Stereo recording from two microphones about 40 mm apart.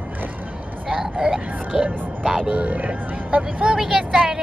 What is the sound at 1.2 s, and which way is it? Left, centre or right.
Speech, right.